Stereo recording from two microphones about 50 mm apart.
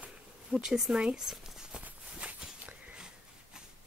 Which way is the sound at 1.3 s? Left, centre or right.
Centre.